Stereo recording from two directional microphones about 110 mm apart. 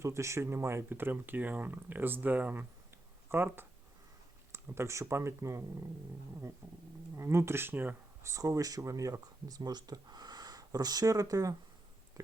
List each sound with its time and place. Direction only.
0.0 s speech: 25° right (ahead or behind)